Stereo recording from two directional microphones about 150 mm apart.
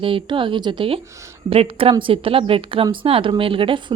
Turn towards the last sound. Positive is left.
turn(degrees=-35)  # may be behind; listen again after turning